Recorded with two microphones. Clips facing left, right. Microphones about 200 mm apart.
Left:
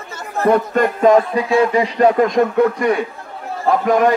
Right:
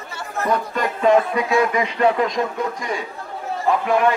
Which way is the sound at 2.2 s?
55° left (ahead or behind).